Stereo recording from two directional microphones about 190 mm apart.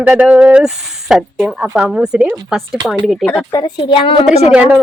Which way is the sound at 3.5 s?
20° left (ahead or behind).